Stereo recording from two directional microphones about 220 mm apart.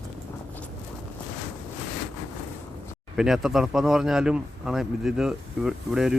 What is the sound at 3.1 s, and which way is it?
Speech, centre (ahead or behind).